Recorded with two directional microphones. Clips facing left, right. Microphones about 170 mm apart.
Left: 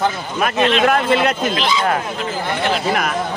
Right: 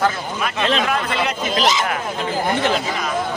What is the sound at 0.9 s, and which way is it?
Speech, 55° left (ahead or behind).